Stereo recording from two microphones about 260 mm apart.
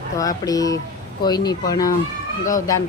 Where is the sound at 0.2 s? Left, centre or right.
Centre.